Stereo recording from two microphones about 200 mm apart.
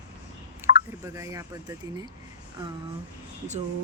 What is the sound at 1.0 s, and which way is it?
Speech, 15° right (ahead or behind).